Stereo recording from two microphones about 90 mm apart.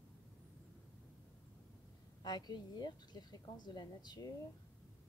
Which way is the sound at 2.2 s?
50° left (ahead or behind).